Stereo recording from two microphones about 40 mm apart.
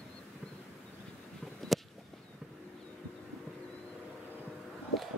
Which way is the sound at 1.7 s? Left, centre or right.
Centre.